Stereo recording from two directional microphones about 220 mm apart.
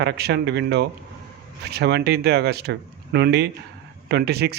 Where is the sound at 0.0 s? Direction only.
50° right (ahead or behind).